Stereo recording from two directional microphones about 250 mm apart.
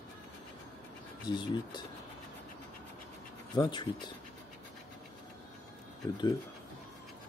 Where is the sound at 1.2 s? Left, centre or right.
Centre.